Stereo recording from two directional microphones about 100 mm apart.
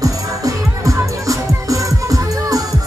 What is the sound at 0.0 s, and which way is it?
Music, 35° right (ahead or behind).